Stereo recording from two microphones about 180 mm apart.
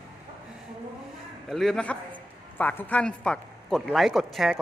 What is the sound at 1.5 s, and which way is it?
Speech, centre (ahead or behind).